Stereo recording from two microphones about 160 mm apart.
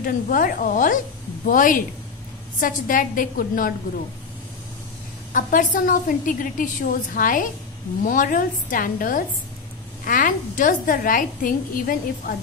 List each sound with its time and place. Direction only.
0.0 s a woman's voice: 60° left (ahead or behind)
5.3 s a woman's voice: 55° left (ahead or behind)